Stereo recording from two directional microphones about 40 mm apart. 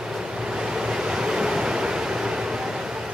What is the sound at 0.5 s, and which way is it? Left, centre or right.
Waves, centre.